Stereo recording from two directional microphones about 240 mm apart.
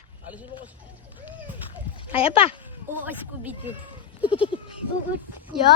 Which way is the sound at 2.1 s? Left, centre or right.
Left.